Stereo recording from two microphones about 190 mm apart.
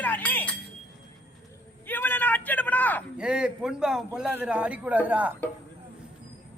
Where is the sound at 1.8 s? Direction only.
10° left (ahead or behind).